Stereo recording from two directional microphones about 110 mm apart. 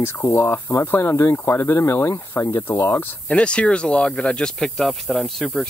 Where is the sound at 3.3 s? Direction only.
10° left (ahead or behind).